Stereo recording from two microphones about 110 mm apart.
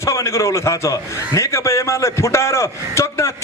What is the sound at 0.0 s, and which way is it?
A man's voice, 25° left (ahead or behind).